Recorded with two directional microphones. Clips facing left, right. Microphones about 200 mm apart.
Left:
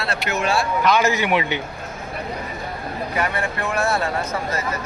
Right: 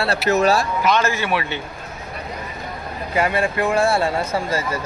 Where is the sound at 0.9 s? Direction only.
15° left (ahead or behind).